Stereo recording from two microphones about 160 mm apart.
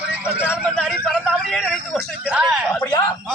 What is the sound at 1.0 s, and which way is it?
A man's voice, 5° left (ahead or behind).